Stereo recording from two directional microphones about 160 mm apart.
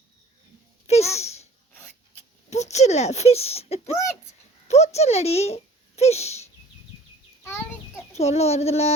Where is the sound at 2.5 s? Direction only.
45° left (ahead or behind).